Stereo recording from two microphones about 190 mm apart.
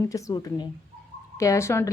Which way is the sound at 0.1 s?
15° left (ahead or behind).